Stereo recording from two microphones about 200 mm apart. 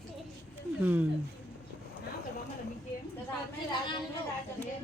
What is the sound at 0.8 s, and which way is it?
Speech, 5° right (ahead or behind).